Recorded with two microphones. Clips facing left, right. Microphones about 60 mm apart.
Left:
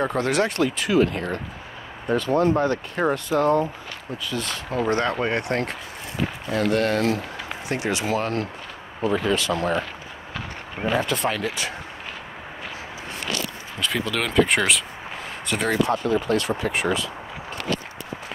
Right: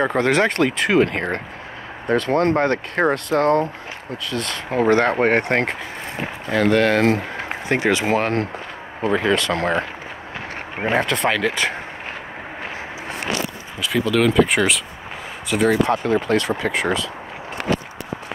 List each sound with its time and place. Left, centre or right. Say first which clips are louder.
0.1 s speech: right 4 dB; right
4.6 s speech: right 7 dB; right
5.2 s speech: right 6 dB; right
6.8 s speech: right 5 dB; right
7.1 s speech: right 5 dB; right
10.9 s speech: right 4 dB; right
11.6 s speech: right 7 dB; right
13.7 s speech: right 6 dB; centre
15.9 s speech: right 3 dB; right